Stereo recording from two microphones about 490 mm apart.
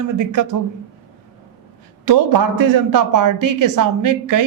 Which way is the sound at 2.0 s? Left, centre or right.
Right.